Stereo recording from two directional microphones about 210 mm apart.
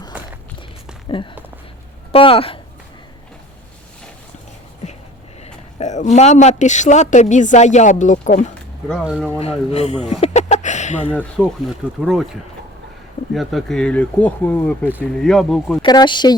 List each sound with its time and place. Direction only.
1.0 s speech: 20° left (ahead or behind)
5.8 s a woman's voice: 35° left (ahead or behind)
8.9 s speech: centre (ahead or behind)
9.4 s speech: 30° left (ahead or behind)
11.1 s speech: 5° left (ahead or behind)
15.8 s speech: 20° left (ahead or behind)